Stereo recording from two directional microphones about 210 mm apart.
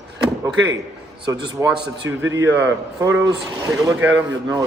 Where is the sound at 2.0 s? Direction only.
65° right (ahead or behind).